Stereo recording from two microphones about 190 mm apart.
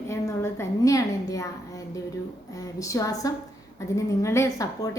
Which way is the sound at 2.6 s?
15° left (ahead or behind).